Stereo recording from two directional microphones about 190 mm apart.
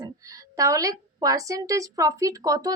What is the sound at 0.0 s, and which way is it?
A woman's voice, 15° right (ahead or behind).